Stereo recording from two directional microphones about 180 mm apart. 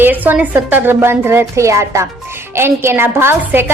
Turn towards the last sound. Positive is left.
turn(degrees=-15)  # may be behind; listen again after turning